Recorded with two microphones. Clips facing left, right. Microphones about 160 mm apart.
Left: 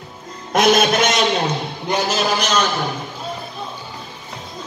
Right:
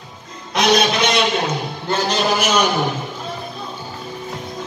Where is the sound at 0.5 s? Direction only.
50° left (ahead or behind).